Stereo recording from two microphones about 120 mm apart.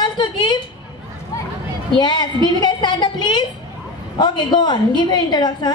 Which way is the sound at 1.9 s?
40° left (ahead or behind).